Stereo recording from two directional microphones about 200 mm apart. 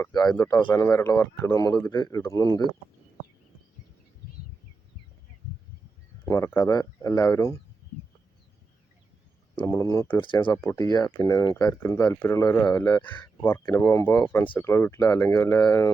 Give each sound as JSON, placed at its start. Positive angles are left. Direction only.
{"t": 0.0, "sound": "speech", "side_deg": 20}
{"t": 0.3, "sound": "speech", "side_deg": 10}
{"t": 6.2, "sound": "speech", "side_deg": 15}
{"t": 9.6, "sound": "speech", "side_deg": 15}